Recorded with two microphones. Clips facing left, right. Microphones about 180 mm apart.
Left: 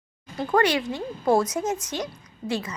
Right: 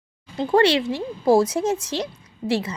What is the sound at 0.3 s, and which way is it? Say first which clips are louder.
A woman's voice: right 4 dB; 30° right (ahead or behind).